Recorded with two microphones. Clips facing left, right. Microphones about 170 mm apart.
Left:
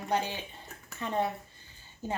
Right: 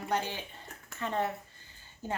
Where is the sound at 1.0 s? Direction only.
15° left (ahead or behind).